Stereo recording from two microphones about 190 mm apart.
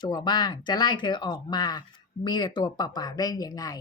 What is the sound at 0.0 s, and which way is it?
A woman's voice, 25° left (ahead or behind).